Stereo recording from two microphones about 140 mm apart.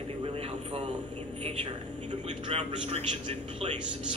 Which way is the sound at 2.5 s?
50° right (ahead or behind).